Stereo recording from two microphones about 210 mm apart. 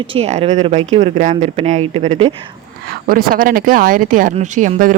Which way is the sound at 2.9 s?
45° right (ahead or behind).